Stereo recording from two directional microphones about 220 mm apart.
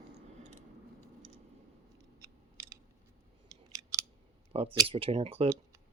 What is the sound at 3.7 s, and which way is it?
Scissors, 15° right (ahead or behind).